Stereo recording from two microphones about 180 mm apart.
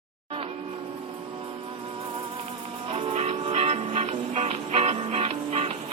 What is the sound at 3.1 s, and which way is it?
Music, 40° right (ahead or behind).